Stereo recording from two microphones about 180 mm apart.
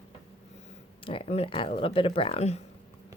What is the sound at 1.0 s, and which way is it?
Speech, 30° left (ahead or behind).